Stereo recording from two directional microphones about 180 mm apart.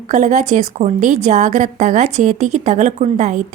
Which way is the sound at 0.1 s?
45° right (ahead or behind).